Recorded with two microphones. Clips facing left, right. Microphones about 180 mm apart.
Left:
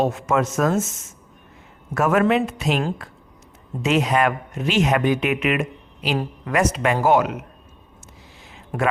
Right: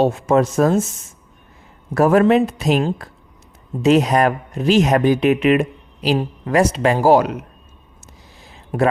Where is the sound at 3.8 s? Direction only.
35° right (ahead or behind).